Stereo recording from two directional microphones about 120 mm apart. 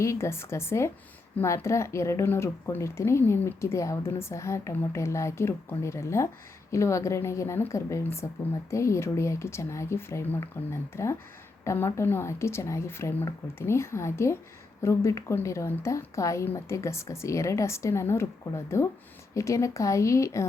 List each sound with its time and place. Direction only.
0.0 s speech: 25° left (ahead or behind)